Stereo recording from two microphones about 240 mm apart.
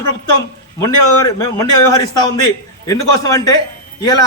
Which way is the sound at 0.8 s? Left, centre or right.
Centre.